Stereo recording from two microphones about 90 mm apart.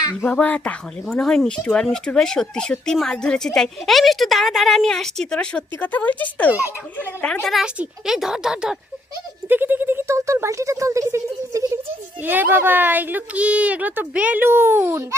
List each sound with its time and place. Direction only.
0.3 s speech: 15° left (ahead or behind)
7.4 s a woman's voice: centre (ahead or behind)
9.5 s speech: 20° right (ahead or behind)
12.2 s a woman's voice: 20° right (ahead or behind)